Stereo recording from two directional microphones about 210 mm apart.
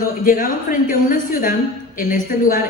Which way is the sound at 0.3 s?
40° left (ahead or behind).